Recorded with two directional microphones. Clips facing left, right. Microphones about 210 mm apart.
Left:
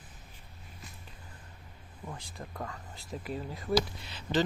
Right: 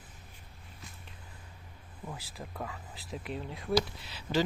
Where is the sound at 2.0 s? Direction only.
5° right (ahead or behind).